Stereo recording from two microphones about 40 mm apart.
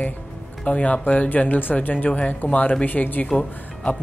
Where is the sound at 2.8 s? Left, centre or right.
Left.